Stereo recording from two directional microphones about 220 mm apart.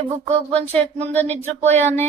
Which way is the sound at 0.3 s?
30° right (ahead or behind).